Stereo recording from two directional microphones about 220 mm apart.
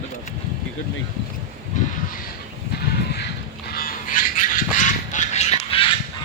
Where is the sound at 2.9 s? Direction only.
45° left (ahead or behind).